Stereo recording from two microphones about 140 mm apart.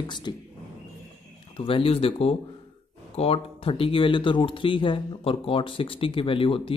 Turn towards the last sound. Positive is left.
turn(degrees=40)  # may be behind; listen again after turning